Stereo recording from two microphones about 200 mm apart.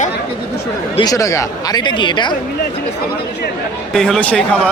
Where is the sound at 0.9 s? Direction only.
20° left (ahead or behind).